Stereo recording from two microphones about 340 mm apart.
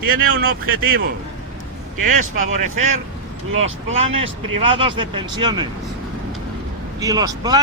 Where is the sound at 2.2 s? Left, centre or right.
Right.